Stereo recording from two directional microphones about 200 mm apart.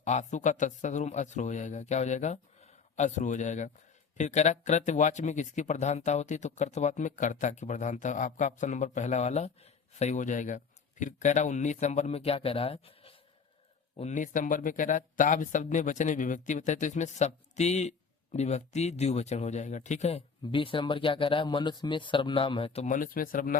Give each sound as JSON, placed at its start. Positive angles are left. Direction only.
{"t": 0.0, "sound": "speech", "side_deg": 35}